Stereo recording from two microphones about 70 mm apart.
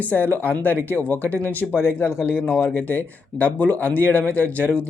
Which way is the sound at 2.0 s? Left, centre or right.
Left.